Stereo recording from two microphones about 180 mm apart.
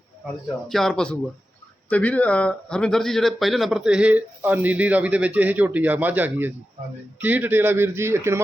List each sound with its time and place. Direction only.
0.7 s speech: centre (ahead or behind); by 8.4 s 15° right (ahead or behind)